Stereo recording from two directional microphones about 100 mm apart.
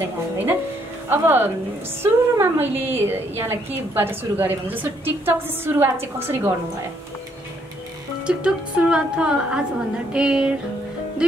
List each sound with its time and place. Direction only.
1.0 s a woman's voice: 20° right (ahead or behind)
8.3 s speech: 10° right (ahead or behind)